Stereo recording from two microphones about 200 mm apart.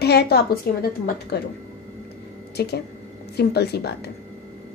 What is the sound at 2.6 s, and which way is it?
A woman's voice, 55° left (ahead or behind).